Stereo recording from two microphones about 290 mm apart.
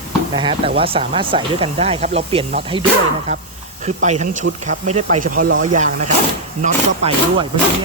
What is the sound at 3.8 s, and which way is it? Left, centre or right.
Speech, right.